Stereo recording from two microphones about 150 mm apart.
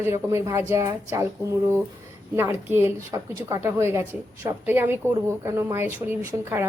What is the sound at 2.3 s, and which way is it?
A woman's voice, 15° right (ahead or behind).